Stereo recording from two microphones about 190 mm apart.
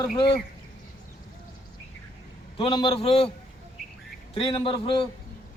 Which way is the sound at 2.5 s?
25° left (ahead or behind).